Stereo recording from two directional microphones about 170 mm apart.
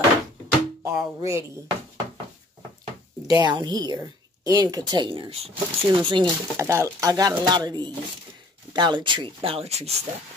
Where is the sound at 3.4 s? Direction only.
25° right (ahead or behind).